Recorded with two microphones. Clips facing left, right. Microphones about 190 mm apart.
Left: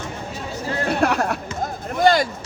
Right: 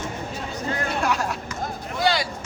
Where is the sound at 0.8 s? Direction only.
60° left (ahead or behind).